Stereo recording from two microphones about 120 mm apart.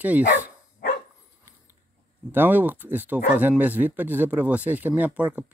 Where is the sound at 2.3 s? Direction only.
15° right (ahead or behind).